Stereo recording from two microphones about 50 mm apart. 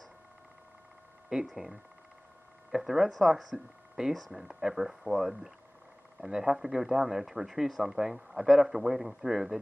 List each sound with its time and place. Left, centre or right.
1.3 s a man's voice: centre
3.5 s a man's voice: centre